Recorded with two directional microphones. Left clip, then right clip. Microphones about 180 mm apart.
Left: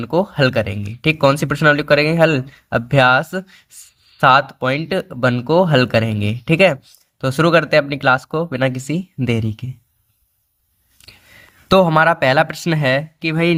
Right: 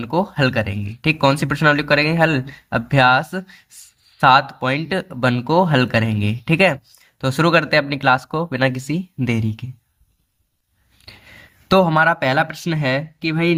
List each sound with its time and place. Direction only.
0.0 s speech: 15° left (ahead or behind)
11.0 s speech: 20° left (ahead or behind)